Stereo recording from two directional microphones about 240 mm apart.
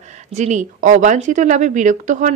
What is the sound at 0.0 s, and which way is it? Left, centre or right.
Speech, right.